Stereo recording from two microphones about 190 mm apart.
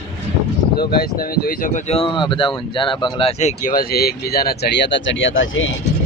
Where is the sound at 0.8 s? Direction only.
50° left (ahead or behind).